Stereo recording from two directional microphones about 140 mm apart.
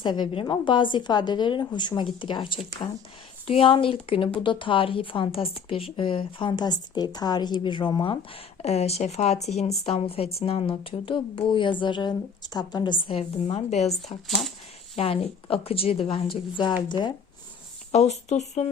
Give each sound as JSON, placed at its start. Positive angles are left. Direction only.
{"t": 0.0, "sound": "a woman's voice", "side_deg": 35}
{"t": 14.9, "sound": "a woman's voice", "side_deg": 45}
{"t": 17.9, "sound": "a woman's voice", "side_deg": 50}